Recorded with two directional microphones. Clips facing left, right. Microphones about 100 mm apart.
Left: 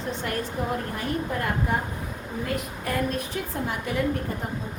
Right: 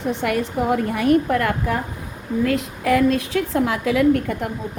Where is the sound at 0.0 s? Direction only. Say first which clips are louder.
Right 8 dB; 70° right (ahead or behind); by 4.4 s 90° right.